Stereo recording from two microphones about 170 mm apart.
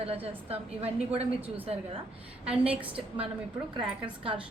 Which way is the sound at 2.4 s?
35° right (ahead or behind).